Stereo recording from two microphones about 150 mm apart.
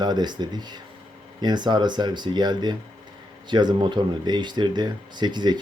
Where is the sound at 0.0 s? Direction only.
30° right (ahead or behind).